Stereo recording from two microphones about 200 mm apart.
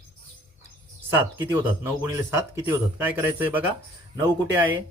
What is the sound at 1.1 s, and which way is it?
Speech, 10° right (ahead or behind).